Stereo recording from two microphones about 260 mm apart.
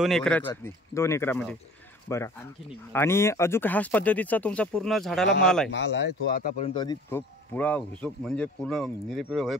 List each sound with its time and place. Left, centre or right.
0.0 s speech: centre
5.7 s speech: left
6.6 s speech: centre